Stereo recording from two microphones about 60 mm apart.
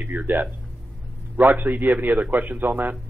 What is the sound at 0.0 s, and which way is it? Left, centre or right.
Speech, right.